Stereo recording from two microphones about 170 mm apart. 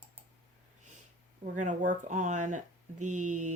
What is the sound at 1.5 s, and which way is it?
Speech, 45° right (ahead or behind).